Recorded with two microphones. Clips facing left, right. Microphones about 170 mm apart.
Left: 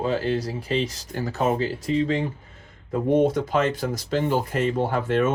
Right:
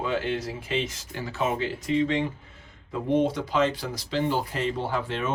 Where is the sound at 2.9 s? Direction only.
50° left (ahead or behind).